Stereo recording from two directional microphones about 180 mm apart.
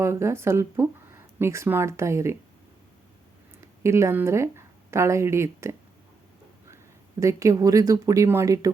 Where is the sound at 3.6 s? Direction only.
15° right (ahead or behind).